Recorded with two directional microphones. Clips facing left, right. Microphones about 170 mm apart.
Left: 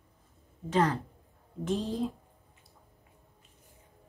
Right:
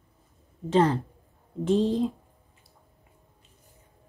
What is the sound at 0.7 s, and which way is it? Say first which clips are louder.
Speech: right 5 dB; 30° right (ahead or behind).